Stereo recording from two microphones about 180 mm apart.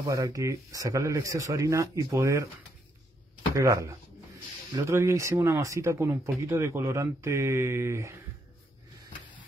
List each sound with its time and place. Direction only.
0.0 s speech: 20° right (ahead or behind)
3.5 s speech: 15° right (ahead or behind)